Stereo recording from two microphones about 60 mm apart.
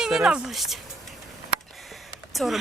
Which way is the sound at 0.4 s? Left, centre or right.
Centre.